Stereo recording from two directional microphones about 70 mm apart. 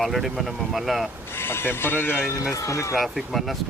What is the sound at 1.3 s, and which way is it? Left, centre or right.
Speech, left.